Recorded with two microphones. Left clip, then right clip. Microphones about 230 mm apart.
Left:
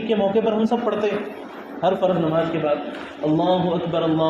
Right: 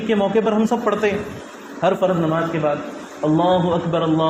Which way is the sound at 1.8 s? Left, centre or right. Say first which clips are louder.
Right 2 dB; right.